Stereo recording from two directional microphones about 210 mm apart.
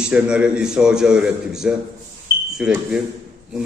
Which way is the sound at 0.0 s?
5° right (ahead or behind).